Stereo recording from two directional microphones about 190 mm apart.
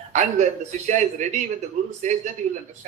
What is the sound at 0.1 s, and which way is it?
A man's voice, 40° right (ahead or behind).